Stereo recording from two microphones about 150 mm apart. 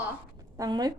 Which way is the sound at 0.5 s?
25° right (ahead or behind).